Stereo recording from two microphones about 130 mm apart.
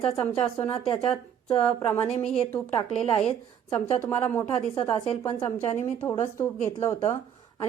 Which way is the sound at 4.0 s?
15° left (ahead or behind).